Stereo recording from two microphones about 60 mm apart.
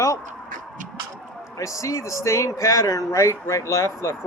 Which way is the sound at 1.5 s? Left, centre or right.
Left.